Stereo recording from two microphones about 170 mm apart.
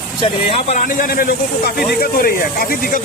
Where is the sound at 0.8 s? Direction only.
55° left (ahead or behind).